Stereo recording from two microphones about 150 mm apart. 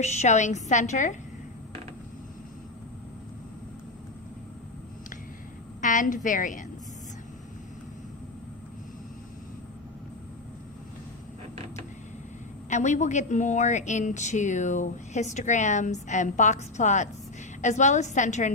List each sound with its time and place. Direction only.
0.0 s a woman's voice: 50° left (ahead or behind)
5.8 s a sound: 60° left (ahead or behind)
6.2 s a woman's voice: 60° left (ahead or behind)
12.7 s a woman's voice: 50° left (ahead or behind)